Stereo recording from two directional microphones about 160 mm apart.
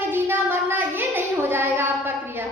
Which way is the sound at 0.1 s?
15° right (ahead or behind).